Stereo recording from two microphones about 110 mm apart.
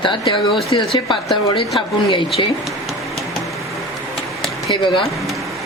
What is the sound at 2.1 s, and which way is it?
Speech, 50° left (ahead or behind).